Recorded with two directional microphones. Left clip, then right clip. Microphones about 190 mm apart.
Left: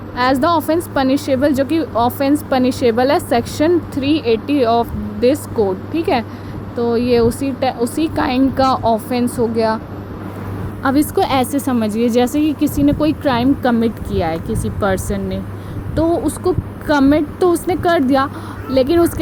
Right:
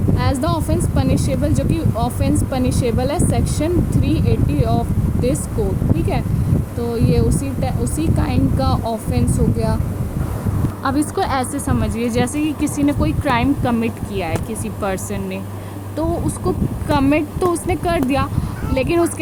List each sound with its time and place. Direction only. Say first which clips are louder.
0.2 s a woman's voice: left 10 dB; 20° left (ahead or behind)
10.8 s a woman's voice: left 4 dB; 25° left (ahead or behind)
17.7 s speech: left 4 dB; 5° right (ahead or behind)